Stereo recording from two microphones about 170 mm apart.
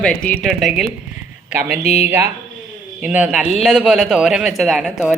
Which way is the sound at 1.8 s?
40° left (ahead or behind).